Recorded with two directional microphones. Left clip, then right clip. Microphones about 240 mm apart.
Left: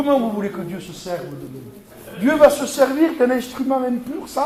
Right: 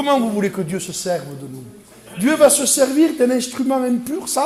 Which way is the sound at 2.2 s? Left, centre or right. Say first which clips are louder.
Even; right.